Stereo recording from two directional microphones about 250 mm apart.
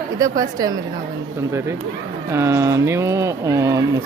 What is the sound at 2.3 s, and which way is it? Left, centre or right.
Speech, centre.